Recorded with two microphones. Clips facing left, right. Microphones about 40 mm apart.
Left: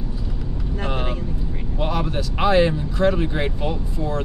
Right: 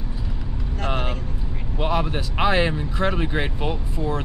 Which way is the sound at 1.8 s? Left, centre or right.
Right.